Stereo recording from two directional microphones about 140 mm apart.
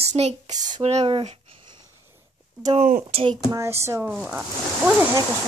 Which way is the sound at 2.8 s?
70° right (ahead or behind).